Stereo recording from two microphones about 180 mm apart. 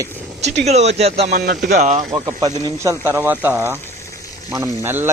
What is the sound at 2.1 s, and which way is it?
Speech, 20° right (ahead or behind).